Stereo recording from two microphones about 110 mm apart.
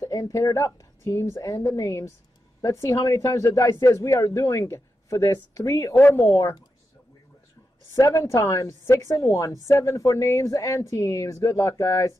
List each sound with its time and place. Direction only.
0.0 s speech: 30° left (ahead or behind)
5.9 s speech: 20° left (ahead or behind)
7.9 s speech: 30° left (ahead or behind)